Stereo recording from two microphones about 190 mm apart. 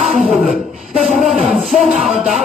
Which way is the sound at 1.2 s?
Centre (ahead or behind).